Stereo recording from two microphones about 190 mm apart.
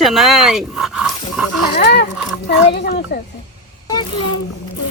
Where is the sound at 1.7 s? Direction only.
55° left (ahead or behind).